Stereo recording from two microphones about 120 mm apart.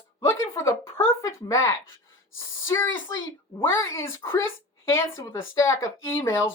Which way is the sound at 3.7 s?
20° left (ahead or behind).